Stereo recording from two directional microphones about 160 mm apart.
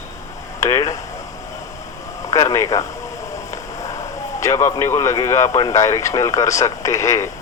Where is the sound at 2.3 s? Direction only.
20° left (ahead or behind).